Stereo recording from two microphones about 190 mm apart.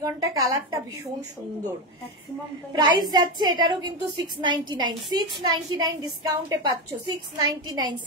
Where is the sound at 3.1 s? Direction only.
20° right (ahead or behind).